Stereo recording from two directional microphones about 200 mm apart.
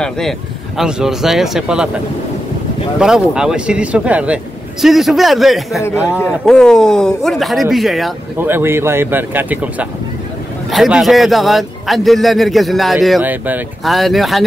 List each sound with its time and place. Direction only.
0.0 s a man's voice: centre (ahead or behind)
3.0 s a man's voice: 5° right (ahead or behind)
8.5 s a man's voice: 10° right (ahead or behind)